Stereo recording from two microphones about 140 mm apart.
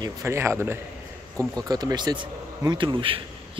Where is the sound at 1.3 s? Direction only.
25° right (ahead or behind).